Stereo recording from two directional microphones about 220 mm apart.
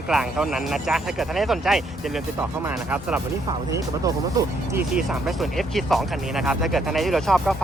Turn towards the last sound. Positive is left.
turn(degrees=0)  # may be behind; listen again after turning